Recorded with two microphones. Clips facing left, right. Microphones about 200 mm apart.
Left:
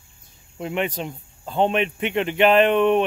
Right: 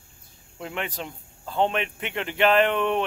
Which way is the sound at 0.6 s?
20° left (ahead or behind).